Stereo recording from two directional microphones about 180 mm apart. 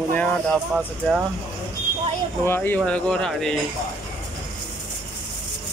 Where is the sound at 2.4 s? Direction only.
10° left (ahead or behind).